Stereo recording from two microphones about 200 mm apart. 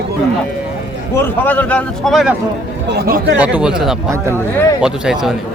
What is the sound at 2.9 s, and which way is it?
Speech, 55° right (ahead or behind).